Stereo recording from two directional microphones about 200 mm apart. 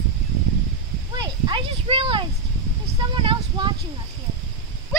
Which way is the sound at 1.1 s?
20° right (ahead or behind).